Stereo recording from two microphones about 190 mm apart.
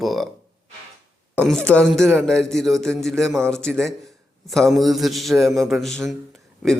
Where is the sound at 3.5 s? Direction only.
5° left (ahead or behind).